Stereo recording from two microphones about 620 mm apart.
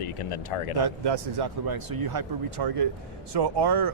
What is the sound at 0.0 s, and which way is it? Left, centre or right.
Speech, left.